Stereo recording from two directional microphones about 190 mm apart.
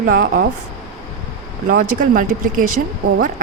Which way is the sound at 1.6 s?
45° right (ahead or behind).